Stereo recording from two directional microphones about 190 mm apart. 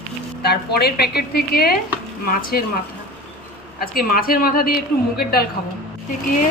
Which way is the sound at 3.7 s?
50° left (ahead or behind).